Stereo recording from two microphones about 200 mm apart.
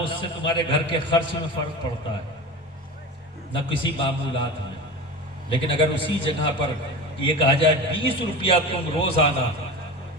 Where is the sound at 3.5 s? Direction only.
25° left (ahead or behind).